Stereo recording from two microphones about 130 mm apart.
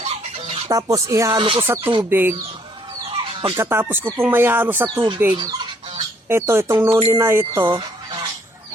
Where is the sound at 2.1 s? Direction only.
15° right (ahead or behind).